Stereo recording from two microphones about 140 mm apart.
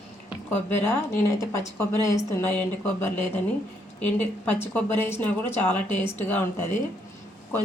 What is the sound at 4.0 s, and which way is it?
Speech, 10° left (ahead or behind).